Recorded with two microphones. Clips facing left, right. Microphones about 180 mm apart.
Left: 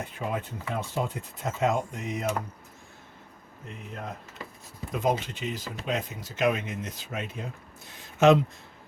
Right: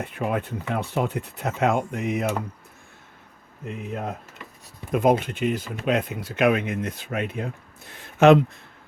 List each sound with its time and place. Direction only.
0.0 s speech: 65° right (ahead or behind)
4.9 s speech: 60° right (ahead or behind)